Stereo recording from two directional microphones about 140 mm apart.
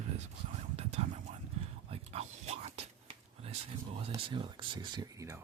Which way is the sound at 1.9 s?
50° right (ahead or behind).